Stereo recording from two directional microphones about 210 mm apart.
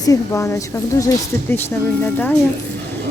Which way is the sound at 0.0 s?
15° left (ahead or behind).